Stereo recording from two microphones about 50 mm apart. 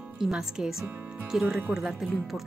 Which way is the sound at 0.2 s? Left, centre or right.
Centre.